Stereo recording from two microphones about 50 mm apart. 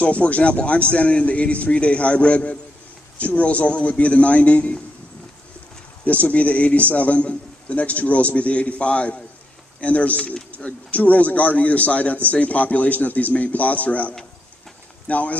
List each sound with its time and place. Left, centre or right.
0.0 s a man's voice: left
6.0 s a man's voice: left